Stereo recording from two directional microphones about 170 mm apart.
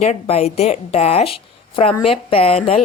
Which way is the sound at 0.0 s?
40° left (ahead or behind).